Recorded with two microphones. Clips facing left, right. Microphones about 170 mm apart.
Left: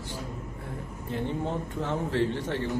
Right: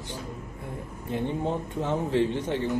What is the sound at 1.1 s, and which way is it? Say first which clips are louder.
Speech: right 2 dB; 15° right (ahead or behind).